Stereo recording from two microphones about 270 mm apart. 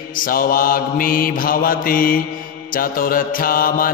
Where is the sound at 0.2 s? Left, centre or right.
Left.